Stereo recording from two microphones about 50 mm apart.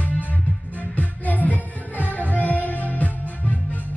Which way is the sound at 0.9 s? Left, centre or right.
Left.